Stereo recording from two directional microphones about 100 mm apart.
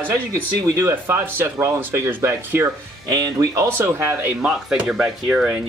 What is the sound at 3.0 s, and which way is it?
Speech, 40° right (ahead or behind).